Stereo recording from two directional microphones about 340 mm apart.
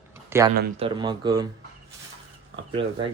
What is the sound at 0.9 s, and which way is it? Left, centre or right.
Speech, centre.